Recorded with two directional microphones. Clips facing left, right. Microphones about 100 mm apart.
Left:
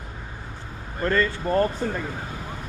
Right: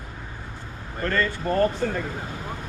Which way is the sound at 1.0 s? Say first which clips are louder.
Left 2 dB; 25° left (ahead or behind).